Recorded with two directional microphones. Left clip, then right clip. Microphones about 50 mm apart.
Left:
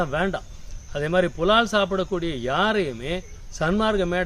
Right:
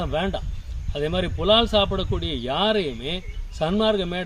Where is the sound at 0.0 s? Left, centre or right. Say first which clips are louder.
Left 1 dB; centre.